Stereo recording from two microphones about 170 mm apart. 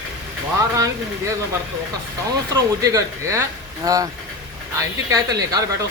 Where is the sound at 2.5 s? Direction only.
20° right (ahead or behind).